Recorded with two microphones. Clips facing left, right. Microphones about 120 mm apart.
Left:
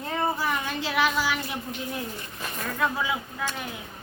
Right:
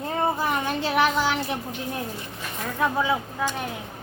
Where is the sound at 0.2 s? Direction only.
20° right (ahead or behind).